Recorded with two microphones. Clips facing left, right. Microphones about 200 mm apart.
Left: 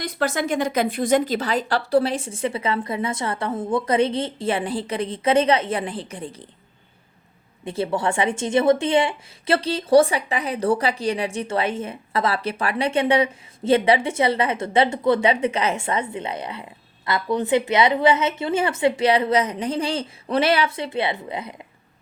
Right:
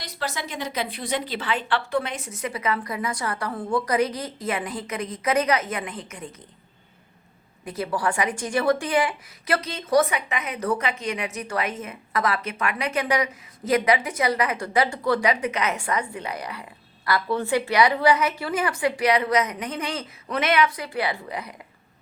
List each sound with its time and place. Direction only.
0.0 s a woman's voice: 50° left (ahead or behind); by 6.3 s 30° left (ahead or behind)
7.6 s a woman's voice: 25° left (ahead or behind)